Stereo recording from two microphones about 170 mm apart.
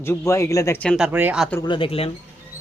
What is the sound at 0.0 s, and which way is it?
Speech, 15° left (ahead or behind).